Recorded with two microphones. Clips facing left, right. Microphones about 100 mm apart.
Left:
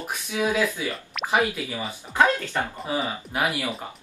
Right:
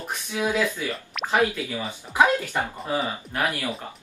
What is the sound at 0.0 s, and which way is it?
Speech, 10° left (ahead or behind).